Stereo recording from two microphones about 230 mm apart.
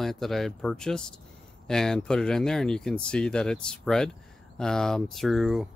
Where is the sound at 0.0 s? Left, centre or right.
Centre.